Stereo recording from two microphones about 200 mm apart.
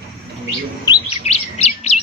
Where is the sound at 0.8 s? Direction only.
30° left (ahead or behind).